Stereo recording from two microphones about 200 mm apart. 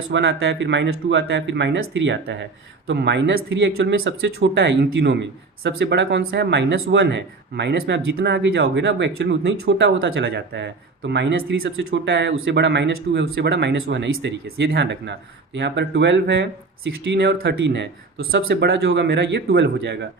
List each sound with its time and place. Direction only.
0.1 s speech: 65° right (ahead or behind)